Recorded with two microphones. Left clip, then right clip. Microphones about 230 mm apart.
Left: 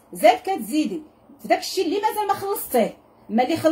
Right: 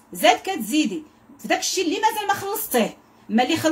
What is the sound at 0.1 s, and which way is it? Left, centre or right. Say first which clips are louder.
A woman's voice: left 1 dB; centre.